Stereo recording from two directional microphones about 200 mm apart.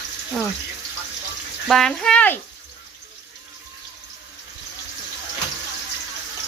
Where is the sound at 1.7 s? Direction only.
Centre (ahead or behind).